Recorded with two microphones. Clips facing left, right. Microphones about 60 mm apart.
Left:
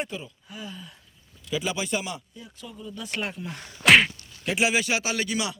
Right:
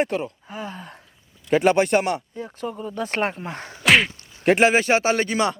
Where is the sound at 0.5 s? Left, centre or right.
Right.